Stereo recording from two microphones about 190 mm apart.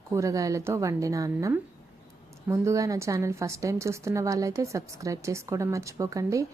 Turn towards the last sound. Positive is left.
turn(degrees=-15)  # may be behind; listen again after turning